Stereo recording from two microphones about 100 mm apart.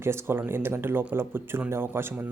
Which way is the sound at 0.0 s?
25° right (ahead or behind).